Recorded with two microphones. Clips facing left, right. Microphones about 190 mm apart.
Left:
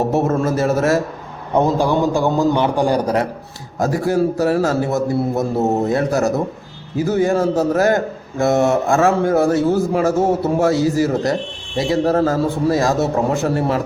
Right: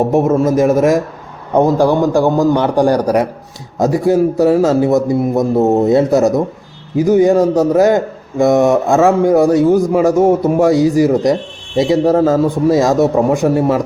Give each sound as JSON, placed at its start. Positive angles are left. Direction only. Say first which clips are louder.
{"t": 0.1, "sound": "a man's voice", "louder": "right 5 dB", "side_deg": -10}
{"t": 3.8, "sound": "a man's voice", "louder": "right 5 dB", "side_deg": -20}